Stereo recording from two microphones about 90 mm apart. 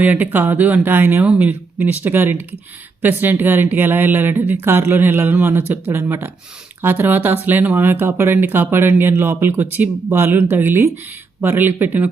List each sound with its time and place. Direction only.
0.0 s speech: 20° right (ahead or behind)